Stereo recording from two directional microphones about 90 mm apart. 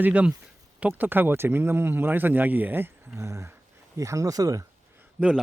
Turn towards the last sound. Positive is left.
turn(degrees=-10)  # may be behind; listen again after turning